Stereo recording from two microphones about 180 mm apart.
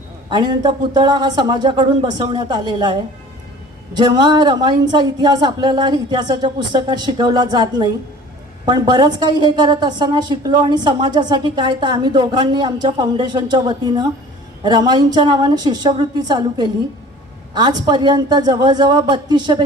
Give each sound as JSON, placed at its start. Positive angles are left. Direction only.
{"t": 0.3, "sound": "a woman's voice", "side_deg": -25}